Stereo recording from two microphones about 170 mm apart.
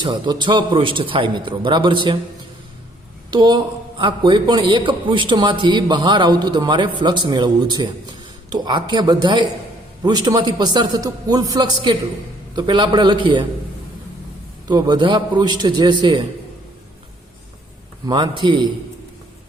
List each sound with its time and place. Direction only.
0.0 s a man's voice: 25° right (ahead or behind)
3.2 s a man's voice: 25° right (ahead or behind)
14.7 s a man's voice: 25° right (ahead or behind)
18.0 s a man's voice: 25° right (ahead or behind)